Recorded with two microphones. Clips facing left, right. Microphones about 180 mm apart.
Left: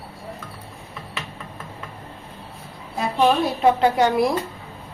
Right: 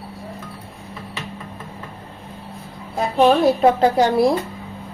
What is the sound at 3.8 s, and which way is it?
Speech, 35° right (ahead or behind).